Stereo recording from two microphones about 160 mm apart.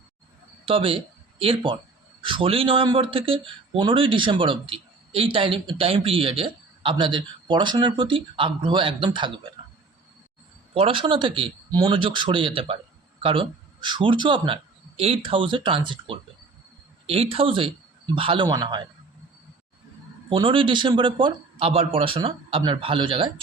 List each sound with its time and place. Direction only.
0.6 s speech: 35° right (ahead or behind)
10.8 s a man's voice: 35° right (ahead or behind)
20.3 s speech: 35° right (ahead or behind)